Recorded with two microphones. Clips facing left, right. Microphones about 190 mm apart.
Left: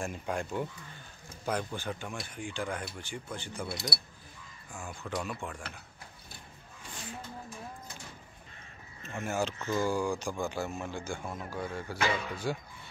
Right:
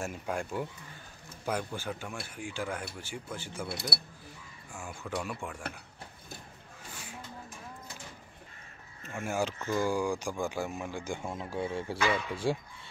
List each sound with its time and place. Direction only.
0.0 s speech: 5° right (ahead or behind)
3.7 s speech: 65° right (ahead or behind)
4.7 s speech: 5° right (ahead or behind)
6.9 s a sound: 10° right (ahead or behind)
9.1 s speech: 10° right (ahead or behind); by 12.6 s 30° right (ahead or behind)